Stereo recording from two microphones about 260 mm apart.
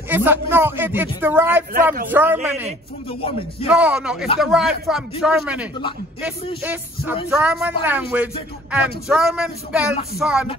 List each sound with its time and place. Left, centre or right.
0.1 s a man's voice: centre
3.1 s a man's voice: left
3.6 s a man's voice: centre